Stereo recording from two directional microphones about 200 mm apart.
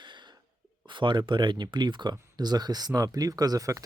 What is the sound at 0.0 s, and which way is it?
Sneeze, 25° right (ahead or behind).